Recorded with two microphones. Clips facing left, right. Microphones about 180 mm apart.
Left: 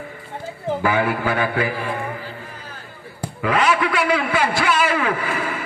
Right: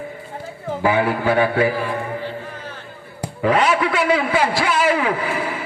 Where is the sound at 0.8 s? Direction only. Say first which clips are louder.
Right 3 dB; 25° right (ahead or behind).